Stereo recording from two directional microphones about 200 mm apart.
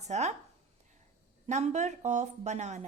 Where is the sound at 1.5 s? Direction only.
35° right (ahead or behind).